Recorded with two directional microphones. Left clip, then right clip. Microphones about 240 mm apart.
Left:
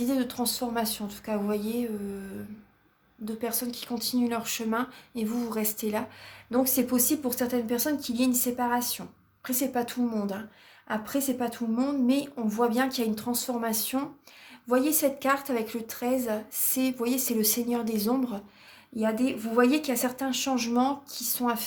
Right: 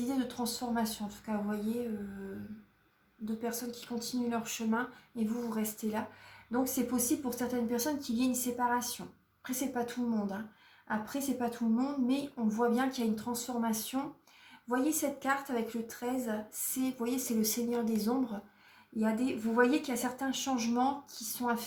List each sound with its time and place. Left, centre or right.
0.0 s speech: left
3.4 s speech: left